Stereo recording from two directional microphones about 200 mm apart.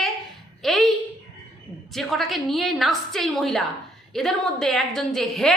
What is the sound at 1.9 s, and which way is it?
A woman's voice, centre (ahead or behind).